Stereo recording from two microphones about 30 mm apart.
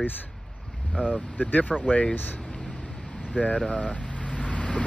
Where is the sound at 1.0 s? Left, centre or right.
Right.